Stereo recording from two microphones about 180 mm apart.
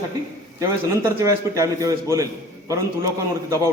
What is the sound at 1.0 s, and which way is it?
A man's voice, 15° right (ahead or behind).